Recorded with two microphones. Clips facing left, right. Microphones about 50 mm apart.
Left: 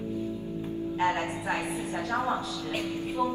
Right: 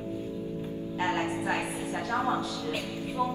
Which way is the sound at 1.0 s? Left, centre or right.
Left.